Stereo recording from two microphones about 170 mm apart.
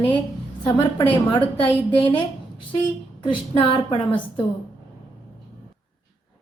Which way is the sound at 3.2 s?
30° left (ahead or behind).